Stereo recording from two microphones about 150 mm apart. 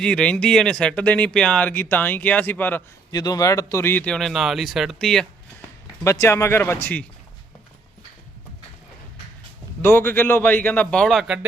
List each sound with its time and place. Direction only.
0.0 s speech: 5° left (ahead or behind)
3.1 s speech: 25° left (ahead or behind); by 5.2 s 5° left (ahead or behind)
6.1 s speech: 20° left (ahead or behind)
9.8 s speech: 15° left (ahead or behind)